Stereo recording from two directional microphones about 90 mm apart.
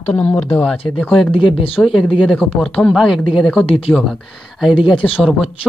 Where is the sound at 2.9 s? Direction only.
Centre (ahead or behind).